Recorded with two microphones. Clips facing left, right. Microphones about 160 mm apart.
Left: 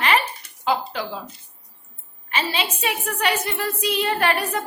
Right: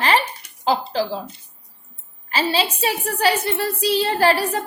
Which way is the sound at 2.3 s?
35° right (ahead or behind).